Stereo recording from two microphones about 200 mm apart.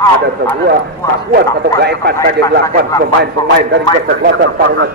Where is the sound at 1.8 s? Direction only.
55° right (ahead or behind).